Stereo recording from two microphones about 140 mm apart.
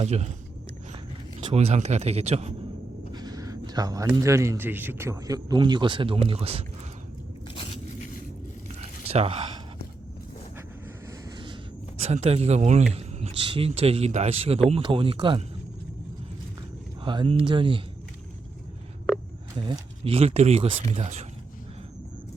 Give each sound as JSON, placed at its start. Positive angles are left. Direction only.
{"t": 0.0, "sound": "speech", "side_deg": -50}
{"t": 1.5, "sound": "speech", "side_deg": -50}
{"t": 3.1, "sound": "speech", "side_deg": -30}
{"t": 8.8, "sound": "a sound", "side_deg": -45}
{"t": 11.0, "sound": "vehicle", "side_deg": -30}
{"t": 12.0, "sound": "speech", "side_deg": -50}
{"t": 17.0, "sound": "speech", "side_deg": -35}
{"t": 19.5, "sound": "speech", "side_deg": -40}